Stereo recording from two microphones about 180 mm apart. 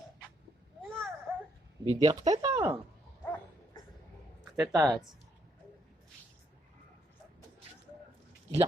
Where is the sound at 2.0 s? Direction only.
20° right (ahead or behind).